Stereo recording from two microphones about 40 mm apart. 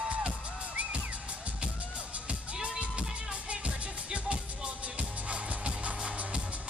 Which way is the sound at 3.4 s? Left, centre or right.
Right.